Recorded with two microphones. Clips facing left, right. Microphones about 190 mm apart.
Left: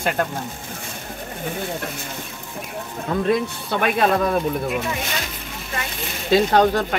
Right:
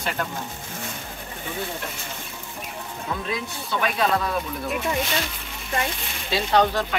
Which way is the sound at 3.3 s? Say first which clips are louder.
Left 8 dB; 55° left (ahead or behind).